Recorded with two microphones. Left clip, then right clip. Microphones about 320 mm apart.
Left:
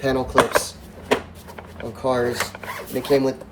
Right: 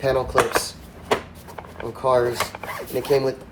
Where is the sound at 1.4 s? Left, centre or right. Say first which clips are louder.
Right 1 dB; centre.